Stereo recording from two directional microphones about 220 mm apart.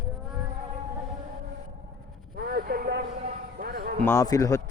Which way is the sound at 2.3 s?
45° right (ahead or behind).